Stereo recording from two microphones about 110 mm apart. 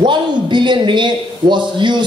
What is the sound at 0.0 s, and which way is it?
A woman's voice, 45° right (ahead or behind).